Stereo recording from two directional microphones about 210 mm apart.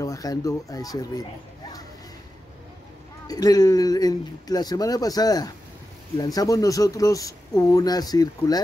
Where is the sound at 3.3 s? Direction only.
20° left (ahead or behind).